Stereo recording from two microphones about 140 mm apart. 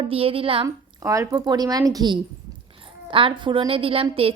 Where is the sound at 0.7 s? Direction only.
25° right (ahead or behind); by 4.3 s 40° right (ahead or behind).